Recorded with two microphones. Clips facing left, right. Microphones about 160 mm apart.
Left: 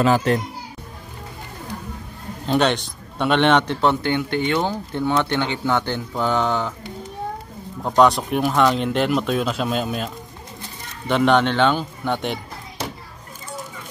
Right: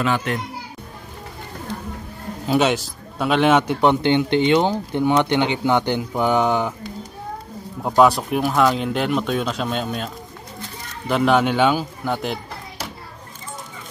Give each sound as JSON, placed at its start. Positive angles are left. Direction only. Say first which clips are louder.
{"t": 0.0, "sound": "a child's voice", "louder": "left 4 dB", "side_deg": 40}
{"t": 2.4, "sound": "a man's voice", "louder": "right 1 dB", "side_deg": -5}
{"t": 7.8, "sound": "speech", "louder": "right 1 dB", "side_deg": -5}